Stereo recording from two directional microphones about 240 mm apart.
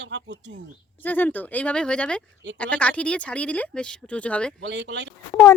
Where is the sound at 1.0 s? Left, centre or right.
Centre.